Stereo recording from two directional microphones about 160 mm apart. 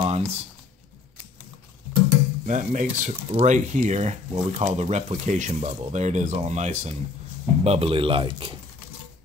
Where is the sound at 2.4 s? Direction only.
50° right (ahead or behind).